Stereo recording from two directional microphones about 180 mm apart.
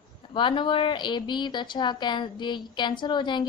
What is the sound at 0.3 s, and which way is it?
A woman's voice, 25° left (ahead or behind).